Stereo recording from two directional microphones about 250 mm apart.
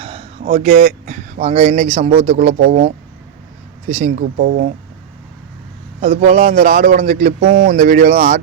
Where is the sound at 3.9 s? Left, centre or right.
Right.